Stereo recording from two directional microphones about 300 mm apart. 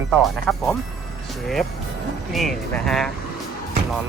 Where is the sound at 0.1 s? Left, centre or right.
Centre.